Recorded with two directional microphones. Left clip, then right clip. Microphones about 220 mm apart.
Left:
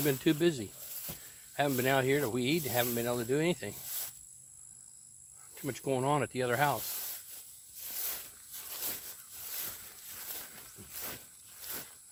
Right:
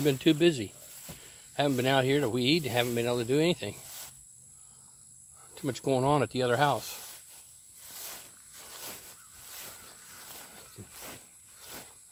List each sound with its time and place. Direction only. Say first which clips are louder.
0.0 s speech: right 5 dB; 25° right (ahead or behind)
0.8 s snake: left 1 dB; 50° left (ahead or behind)
1.5 s speech: right 3 dB; 25° right (ahead or behind)
3.8 s snake: left 1 dB; 50° left (ahead or behind)
5.5 s speech: right 5 dB; 30° right (ahead or behind)
6.8 s snake: right 1 dB; 50° left (ahead or behind)
10.9 s a sound: left 2 dB; 50° left (ahead or behind)